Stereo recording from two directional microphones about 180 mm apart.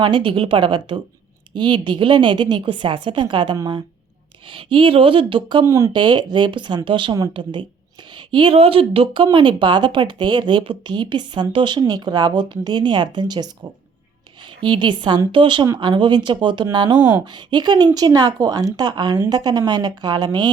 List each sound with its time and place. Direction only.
0.0 s speech: 30° right (ahead or behind)
5.6 s speech: 15° right (ahead or behind)
14.6 s speech: 25° right (ahead or behind)